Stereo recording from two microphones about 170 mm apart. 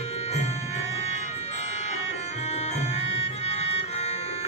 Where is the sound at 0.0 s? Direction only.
40° left (ahead or behind).